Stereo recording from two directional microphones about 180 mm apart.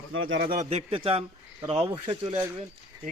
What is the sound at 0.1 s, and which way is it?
Speech, 90° right.